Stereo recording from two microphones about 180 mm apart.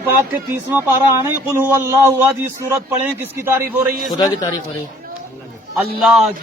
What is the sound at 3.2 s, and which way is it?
Speech, 10° right (ahead or behind).